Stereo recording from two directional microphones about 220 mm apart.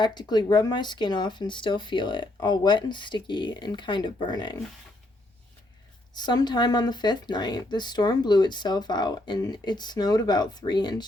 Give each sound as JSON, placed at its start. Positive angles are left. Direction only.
{"t": 0.0, "sound": "speech", "side_deg": 20}
{"t": 6.1, "sound": "speech", "side_deg": 20}